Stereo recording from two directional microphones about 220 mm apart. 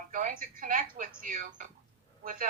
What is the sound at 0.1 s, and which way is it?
Speech, 40° right (ahead or behind).